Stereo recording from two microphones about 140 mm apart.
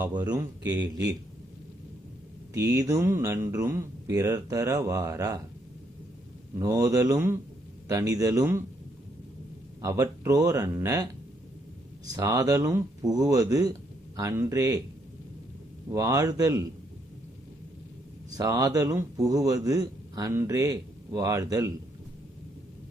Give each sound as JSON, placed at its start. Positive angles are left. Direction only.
{"t": 0.1, "sound": "a man's voice", "side_deg": -30}
{"t": 2.5, "sound": "a man's voice", "side_deg": -25}
{"t": 6.6, "sound": "a man's voice", "side_deg": -25}
{"t": 9.8, "sound": "a man's voice", "side_deg": -20}
{"t": 12.1, "sound": "a man's voice", "side_deg": -25}
{"t": 15.9, "sound": "a man's voice", "side_deg": -25}
{"t": 18.3, "sound": "a man's voice", "side_deg": -25}